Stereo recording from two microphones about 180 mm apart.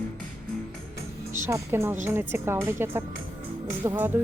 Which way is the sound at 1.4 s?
15° right (ahead or behind).